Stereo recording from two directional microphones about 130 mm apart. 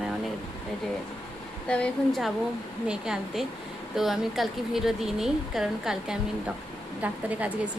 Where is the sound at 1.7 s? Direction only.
5° left (ahead or behind).